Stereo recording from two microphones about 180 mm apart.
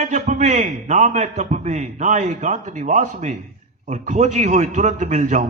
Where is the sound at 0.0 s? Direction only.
40° right (ahead or behind).